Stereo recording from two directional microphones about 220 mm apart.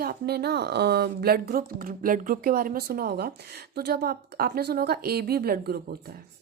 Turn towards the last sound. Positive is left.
turn(degrees=-45)  # may be behind; listen again after turning